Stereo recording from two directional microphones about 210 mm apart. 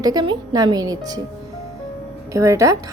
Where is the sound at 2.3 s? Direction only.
15° right (ahead or behind).